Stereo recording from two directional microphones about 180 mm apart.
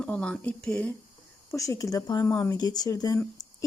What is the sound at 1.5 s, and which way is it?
Speech, 20° left (ahead or behind).